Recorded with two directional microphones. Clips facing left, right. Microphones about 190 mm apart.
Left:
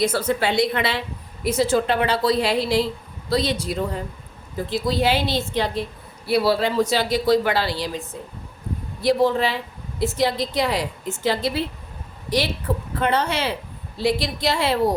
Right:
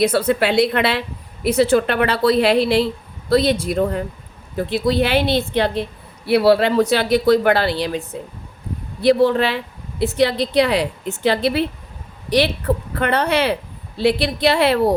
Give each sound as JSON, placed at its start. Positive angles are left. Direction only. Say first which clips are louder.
{"t": 0.0, "sound": "a woman's voice", "louder": "right 4 dB", "side_deg": -60}